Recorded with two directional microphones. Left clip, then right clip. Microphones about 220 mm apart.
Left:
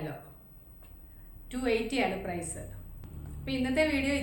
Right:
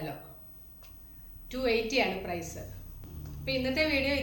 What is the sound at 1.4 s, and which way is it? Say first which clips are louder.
Speech: right 1 dB; 10° left (ahead or behind).